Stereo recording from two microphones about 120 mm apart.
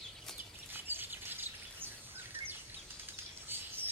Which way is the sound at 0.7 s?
15° right (ahead or behind).